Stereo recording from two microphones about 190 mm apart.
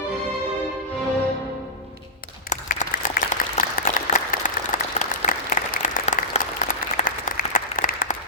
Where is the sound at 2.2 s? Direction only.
45° left (ahead or behind).